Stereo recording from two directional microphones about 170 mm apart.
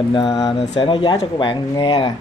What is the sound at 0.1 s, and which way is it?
Speech, 30° left (ahead or behind).